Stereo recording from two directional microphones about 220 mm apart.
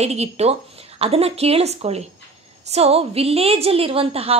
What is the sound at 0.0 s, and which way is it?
A woman's voice, 30° right (ahead or behind).